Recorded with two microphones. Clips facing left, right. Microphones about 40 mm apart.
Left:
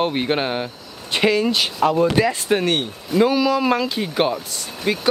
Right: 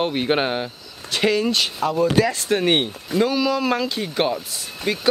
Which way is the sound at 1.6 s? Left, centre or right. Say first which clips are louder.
Left 3 dB; left.